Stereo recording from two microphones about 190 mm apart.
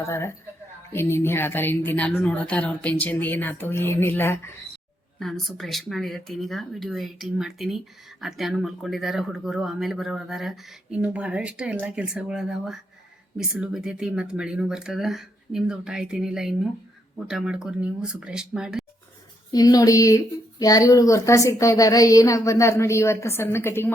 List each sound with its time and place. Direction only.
0.0 s speech: 15° left (ahead or behind)
5.2 s speech: centre (ahead or behind)
19.5 s speech: 20° left (ahead or behind)